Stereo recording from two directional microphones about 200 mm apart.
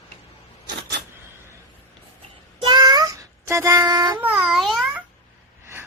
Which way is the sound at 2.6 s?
20° right (ahead or behind).